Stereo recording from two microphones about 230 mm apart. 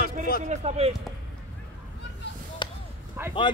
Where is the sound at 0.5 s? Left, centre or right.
Right.